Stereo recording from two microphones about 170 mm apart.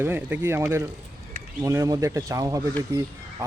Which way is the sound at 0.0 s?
15° right (ahead or behind).